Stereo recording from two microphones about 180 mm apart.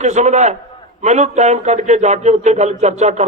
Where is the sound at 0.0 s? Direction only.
40° right (ahead or behind).